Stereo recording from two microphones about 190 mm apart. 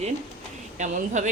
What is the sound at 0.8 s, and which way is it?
Speech, 40° right (ahead or behind).